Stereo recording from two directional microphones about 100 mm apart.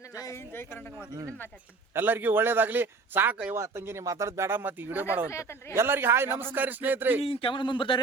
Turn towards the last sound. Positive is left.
turn(degrees=55)  # may be behind; listen again after turning